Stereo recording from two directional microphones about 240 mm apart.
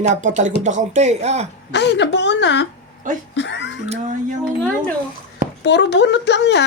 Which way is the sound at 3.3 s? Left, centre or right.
Left.